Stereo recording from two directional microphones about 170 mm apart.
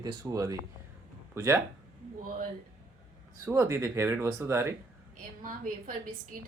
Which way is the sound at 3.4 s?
15° right (ahead or behind).